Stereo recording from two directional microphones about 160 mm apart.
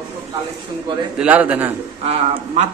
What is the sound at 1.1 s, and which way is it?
Speech, 10° right (ahead or behind).